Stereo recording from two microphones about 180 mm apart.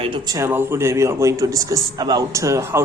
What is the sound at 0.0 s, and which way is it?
A man's voice, 25° right (ahead or behind).